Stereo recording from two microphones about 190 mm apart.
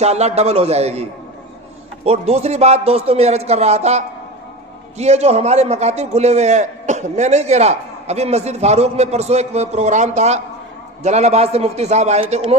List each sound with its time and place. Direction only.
0.0 s a man's voice: 35° right (ahead or behind)
2.0 s a man's voice: 35° right (ahead or behind)